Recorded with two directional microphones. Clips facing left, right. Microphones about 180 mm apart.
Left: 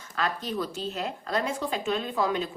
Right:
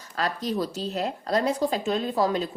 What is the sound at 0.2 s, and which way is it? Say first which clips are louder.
Speech: right 3 dB; 40° right (ahead or behind).